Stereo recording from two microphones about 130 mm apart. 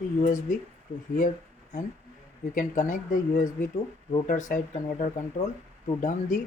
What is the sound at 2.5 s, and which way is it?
Speech, 85° left.